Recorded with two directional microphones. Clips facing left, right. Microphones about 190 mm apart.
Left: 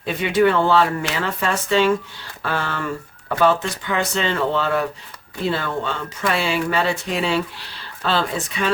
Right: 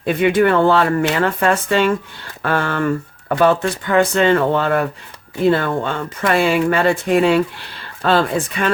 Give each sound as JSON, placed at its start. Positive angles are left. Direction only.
{"t": 0.0, "sound": "speech", "side_deg": -55}